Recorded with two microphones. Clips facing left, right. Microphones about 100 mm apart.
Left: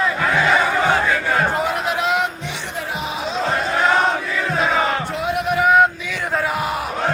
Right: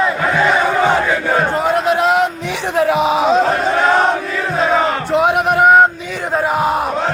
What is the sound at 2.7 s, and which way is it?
Music, 80° right.